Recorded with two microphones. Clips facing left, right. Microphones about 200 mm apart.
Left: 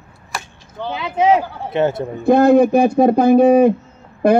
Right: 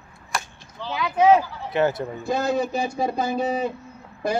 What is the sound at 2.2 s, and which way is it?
A man's voice, 60° left (ahead or behind).